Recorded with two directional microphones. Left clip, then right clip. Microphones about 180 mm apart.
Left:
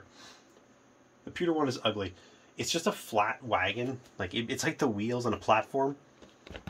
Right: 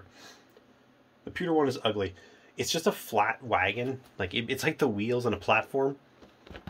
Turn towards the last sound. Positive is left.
turn(degrees=0)  # may be behind; listen again after turning